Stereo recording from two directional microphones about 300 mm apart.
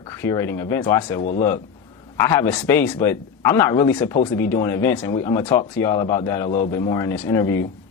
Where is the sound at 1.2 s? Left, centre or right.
Left.